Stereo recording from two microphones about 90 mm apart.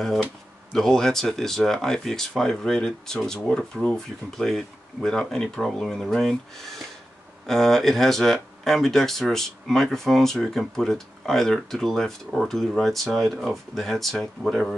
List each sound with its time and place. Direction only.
0.7 s speech: 5° left (ahead or behind)